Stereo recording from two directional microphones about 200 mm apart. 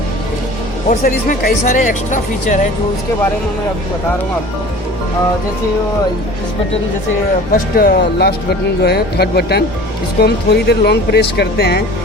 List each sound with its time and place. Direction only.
0.9 s speech: 45° left (ahead or behind)
7.5 s speech: 45° left (ahead or behind)